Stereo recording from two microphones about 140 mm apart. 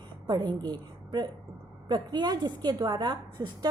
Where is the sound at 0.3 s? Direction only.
30° right (ahead or behind).